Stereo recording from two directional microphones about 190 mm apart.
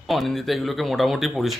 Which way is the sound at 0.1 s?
Centre (ahead or behind).